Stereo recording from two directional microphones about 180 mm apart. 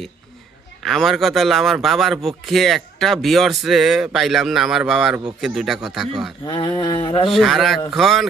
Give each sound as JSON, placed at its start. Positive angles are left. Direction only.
{"t": 0.8, "sound": "a man's voice", "side_deg": 0}
{"t": 6.4, "sound": "a sound", "side_deg": 25}
{"t": 7.2, "sound": "a man's voice", "side_deg": 0}